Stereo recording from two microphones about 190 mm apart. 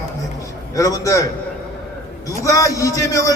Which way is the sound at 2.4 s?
15° left (ahead or behind).